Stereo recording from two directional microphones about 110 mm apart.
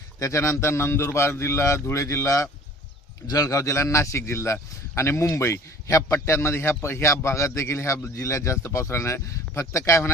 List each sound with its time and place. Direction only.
0.2 s a man's voice: 25° left (ahead or behind)